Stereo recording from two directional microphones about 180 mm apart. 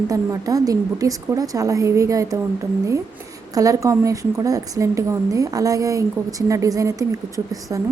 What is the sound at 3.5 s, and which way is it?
A woman's voice, 20° right (ahead or behind).